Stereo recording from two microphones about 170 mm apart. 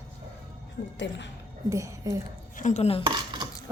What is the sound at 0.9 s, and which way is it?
Speech, 90° left.